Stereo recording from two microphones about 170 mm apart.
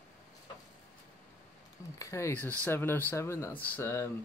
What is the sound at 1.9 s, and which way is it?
Speech, 20° left (ahead or behind).